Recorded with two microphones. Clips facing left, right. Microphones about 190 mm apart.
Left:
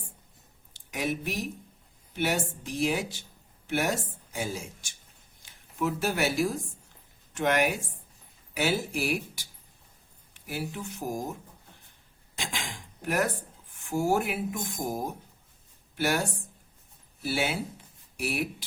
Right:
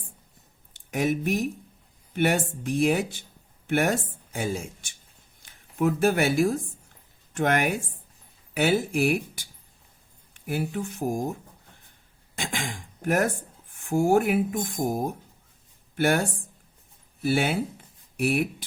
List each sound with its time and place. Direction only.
0.7 s speech: 50° right (ahead or behind)
12.4 s speech: 50° right (ahead or behind)
17.2 s speech: 55° right (ahead or behind)